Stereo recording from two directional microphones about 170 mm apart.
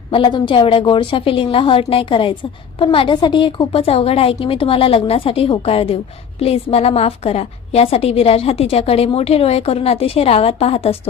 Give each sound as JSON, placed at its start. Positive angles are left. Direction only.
{"t": 0.1, "sound": "a woman's voice", "side_deg": 25}